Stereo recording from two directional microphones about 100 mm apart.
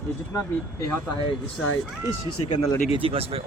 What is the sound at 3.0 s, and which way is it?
Speech, 75° right (ahead or behind).